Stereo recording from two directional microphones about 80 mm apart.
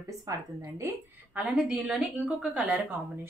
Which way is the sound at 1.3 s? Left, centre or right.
Centre.